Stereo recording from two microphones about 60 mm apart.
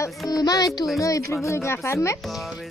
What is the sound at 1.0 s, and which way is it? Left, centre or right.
Speech, left.